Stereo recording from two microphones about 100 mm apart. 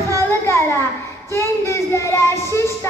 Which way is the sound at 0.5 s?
25° left (ahead or behind).